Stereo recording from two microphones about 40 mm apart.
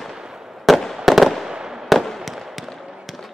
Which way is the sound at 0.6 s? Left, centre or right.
Centre.